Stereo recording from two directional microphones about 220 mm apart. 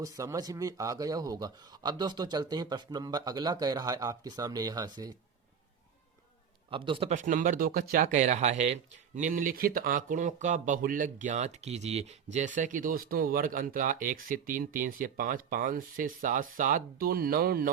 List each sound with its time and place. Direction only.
0.0 s speech: 15° right (ahead or behind)
6.7 s speech: 25° right (ahead or behind); by 17.7 s 40° right (ahead or behind)